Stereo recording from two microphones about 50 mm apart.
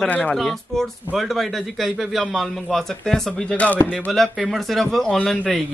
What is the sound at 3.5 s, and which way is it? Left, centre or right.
Speech, left.